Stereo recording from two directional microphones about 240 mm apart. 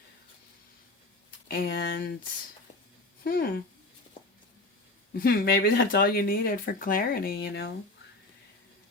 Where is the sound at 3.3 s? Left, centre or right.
Left.